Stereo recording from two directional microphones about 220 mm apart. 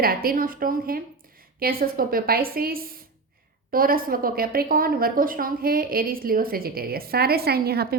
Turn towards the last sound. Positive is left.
turn(degrees=-45)  # may be behind; listen again after turning